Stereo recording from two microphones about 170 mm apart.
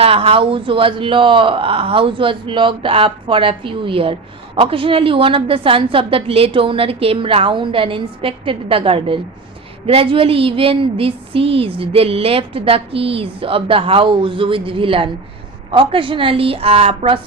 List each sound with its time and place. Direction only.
0.0 s a man's voice: 35° right (ahead or behind)